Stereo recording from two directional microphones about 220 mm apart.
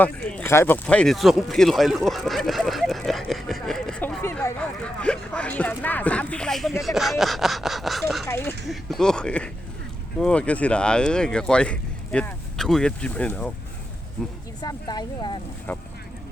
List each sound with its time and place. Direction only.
0.0 s speech: 5° left (ahead or behind)
8.3 s speech: 10° left (ahead or behind)
8.6 s speech: centre (ahead or behind)
14.6 s speech: 20° left (ahead or behind)